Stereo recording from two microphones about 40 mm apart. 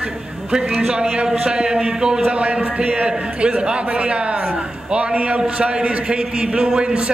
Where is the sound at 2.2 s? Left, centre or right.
Right.